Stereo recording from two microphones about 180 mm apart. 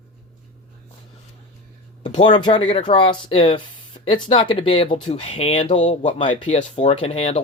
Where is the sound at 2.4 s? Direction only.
25° left (ahead or behind).